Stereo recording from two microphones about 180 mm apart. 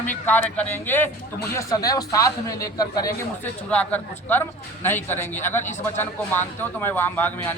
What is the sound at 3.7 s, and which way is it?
A man's voice, 10° left (ahead or behind).